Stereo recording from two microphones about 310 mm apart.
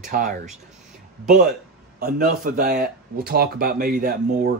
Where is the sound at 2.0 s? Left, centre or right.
Right.